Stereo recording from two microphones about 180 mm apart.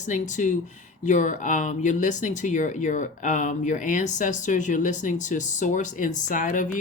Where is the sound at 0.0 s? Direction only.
40° left (ahead or behind).